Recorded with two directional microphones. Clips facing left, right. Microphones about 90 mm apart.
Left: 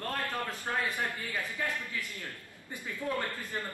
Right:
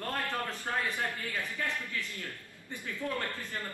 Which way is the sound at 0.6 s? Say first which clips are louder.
Left 2 dB; 20° left (ahead or behind).